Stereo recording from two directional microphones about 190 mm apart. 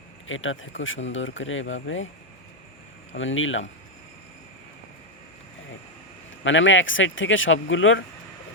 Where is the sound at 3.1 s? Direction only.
90° left.